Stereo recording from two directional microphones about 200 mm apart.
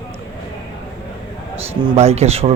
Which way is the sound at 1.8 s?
30° right (ahead or behind).